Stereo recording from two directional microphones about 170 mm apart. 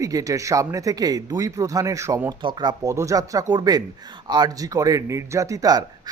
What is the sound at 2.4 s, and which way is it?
A man's voice, 25° right (ahead or behind).